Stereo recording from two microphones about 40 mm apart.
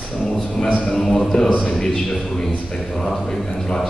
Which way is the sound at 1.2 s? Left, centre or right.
Centre.